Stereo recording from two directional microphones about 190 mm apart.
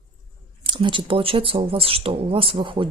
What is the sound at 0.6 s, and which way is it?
Speech, 25° right (ahead or behind).